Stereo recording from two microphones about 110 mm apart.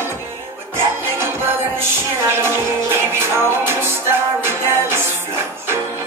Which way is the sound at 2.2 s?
20° right (ahead or behind).